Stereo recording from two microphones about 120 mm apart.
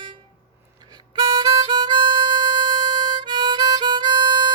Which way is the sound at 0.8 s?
35° right (ahead or behind).